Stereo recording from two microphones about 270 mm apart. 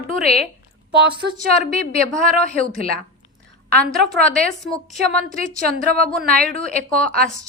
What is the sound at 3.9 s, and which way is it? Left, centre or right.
Speech, centre.